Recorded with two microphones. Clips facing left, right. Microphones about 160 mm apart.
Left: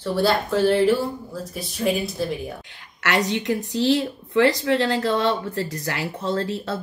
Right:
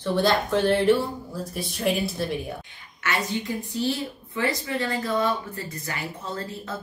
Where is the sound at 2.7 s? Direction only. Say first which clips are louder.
Left 5 dB; 75° left (ahead or behind).